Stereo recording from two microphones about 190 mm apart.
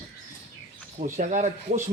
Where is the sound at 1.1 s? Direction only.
40° right (ahead or behind).